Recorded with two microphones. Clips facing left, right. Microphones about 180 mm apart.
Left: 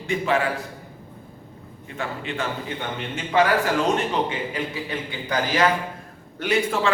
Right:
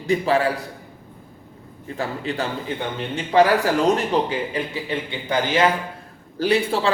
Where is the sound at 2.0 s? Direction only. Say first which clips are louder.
Right 3 dB; 35° right (ahead or behind).